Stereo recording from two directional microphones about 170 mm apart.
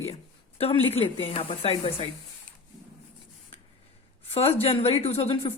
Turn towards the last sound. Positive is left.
turn(degrees=35)  # may be behind; listen again after turning